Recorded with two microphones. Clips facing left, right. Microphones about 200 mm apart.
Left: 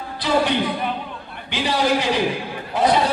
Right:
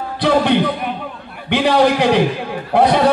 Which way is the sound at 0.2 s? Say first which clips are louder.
Right 5 dB; 60° right (ahead or behind).